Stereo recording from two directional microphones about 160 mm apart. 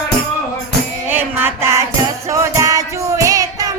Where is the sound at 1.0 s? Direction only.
10° right (ahead or behind).